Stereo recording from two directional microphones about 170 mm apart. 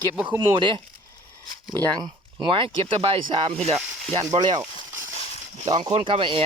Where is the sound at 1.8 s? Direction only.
25° right (ahead or behind).